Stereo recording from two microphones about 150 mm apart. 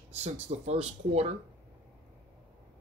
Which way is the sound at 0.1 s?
45° right (ahead or behind).